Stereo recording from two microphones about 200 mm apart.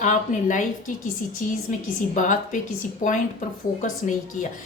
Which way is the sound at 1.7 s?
40° left (ahead or behind).